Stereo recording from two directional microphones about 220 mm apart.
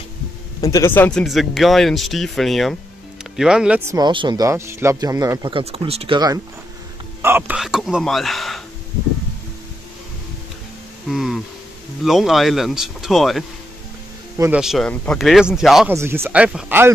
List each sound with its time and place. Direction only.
0.6 s speech: 15° left (ahead or behind)
11.1 s speech: centre (ahead or behind)
15.9 s speech: 10° right (ahead or behind)